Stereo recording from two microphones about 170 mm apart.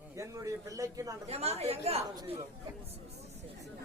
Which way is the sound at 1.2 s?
40° right (ahead or behind).